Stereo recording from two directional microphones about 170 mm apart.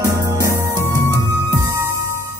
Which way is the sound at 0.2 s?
20° right (ahead or behind).